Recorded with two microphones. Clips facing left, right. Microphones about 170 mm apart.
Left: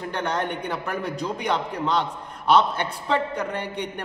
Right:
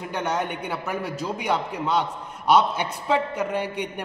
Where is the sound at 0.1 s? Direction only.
10° right (ahead or behind).